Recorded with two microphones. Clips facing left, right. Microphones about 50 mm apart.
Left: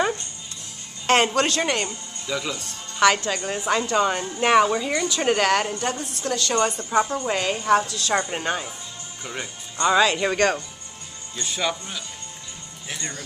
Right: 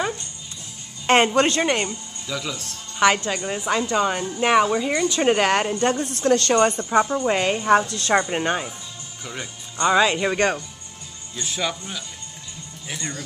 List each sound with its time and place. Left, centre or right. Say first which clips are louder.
1.0 s a woman's voice: right 2 dB; right
2.2 s speech: left 1 dB; centre
3.0 s a woman's voice: even; centre
5.2 s a woman's voice: right 1 dB; centre
6.2 s a woman's voice: right 7 dB; right
6.5 s a woman's voice: right 4 dB; right
7.0 s a woman's voice: right 2 dB; centre
7.3 s a woman's voice: right 1 dB; right
7.8 s a woman's voice: right 1 dB; right
8.1 s a woman's voice: right 4 dB; centre
9.2 s speech: left 1 dB; centre
9.8 s a woman's voice: right 1 dB; centre
11.4 s speech: left 1 dB; centre